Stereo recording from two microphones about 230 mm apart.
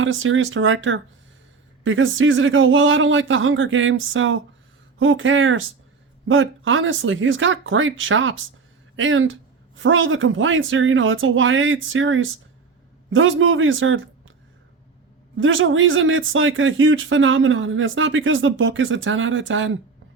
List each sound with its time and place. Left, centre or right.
0.0 s speech: right
15.4 s speech: right